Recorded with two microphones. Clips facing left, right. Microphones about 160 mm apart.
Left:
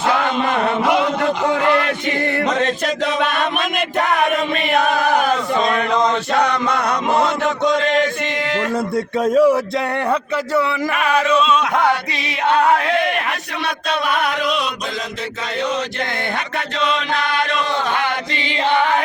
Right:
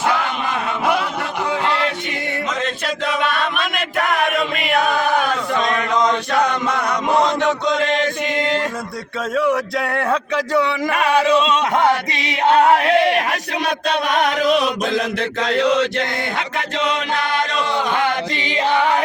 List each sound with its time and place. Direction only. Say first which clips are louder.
5.5 s chant: right 1 dB; 30° left (ahead or behind)
9.3 s a sound: left 5 dB; 35° left (ahead or behind)
14.1 s chant: right 5 dB; 40° right (ahead or behind)
15.5 s chant: right 5 dB; 90° right